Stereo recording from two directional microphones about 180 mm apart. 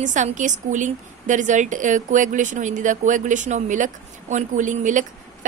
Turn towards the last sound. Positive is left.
turn(degrees=-45)  # may be behind; listen again after turning